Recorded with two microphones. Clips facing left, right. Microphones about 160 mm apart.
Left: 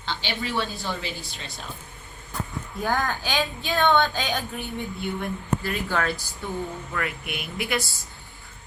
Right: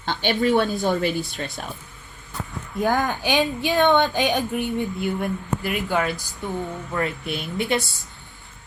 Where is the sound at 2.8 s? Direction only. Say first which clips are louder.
Right 4 dB; 20° right (ahead or behind).